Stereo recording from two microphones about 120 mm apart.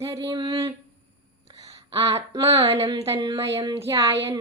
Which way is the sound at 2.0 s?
25° right (ahead or behind).